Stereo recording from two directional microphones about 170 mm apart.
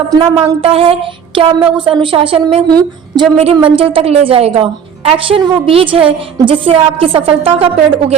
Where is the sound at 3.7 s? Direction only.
30° right (ahead or behind).